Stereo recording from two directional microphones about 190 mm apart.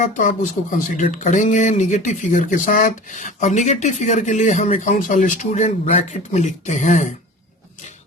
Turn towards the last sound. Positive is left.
turn(degrees=40)  # may be behind; listen again after turning